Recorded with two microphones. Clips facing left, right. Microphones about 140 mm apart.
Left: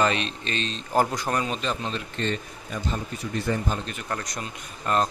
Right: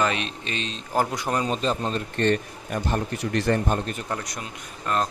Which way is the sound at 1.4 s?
35° right (ahead or behind).